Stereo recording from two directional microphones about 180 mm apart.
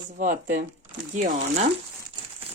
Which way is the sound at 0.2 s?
45° right (ahead or behind).